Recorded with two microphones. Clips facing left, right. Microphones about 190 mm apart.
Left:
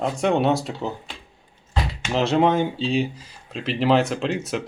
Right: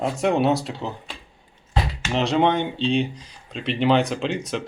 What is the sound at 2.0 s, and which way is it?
Speech, centre (ahead or behind).